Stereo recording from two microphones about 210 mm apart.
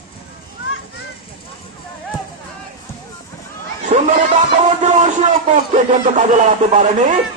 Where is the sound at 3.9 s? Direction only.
40° right (ahead or behind).